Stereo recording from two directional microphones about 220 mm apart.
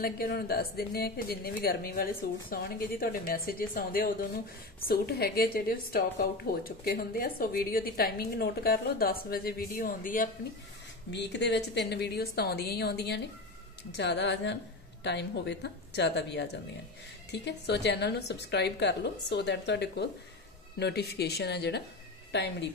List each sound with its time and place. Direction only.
0.0 s a woman's voice: 45° left (ahead or behind)
11.1 s a woman's voice: 50° left (ahead or behind)